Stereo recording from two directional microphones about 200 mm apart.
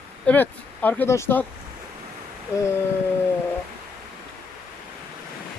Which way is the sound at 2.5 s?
15° left (ahead or behind).